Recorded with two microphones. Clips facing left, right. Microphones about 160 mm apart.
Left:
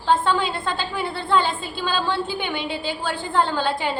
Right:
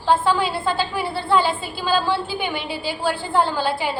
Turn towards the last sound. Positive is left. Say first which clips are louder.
# right 1 dB
turn(degrees=-5)  # may be behind; listen again after turning